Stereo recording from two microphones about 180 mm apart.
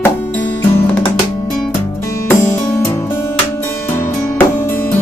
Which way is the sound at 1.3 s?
20° left (ahead or behind).